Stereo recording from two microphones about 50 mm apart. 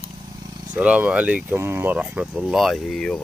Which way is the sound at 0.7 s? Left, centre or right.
Right.